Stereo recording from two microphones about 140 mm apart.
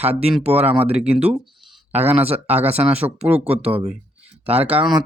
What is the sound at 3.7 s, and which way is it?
Speech, 15° right (ahead or behind).